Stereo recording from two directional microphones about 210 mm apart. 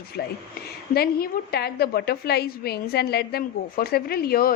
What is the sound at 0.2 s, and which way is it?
Speech, 50° left (ahead or behind).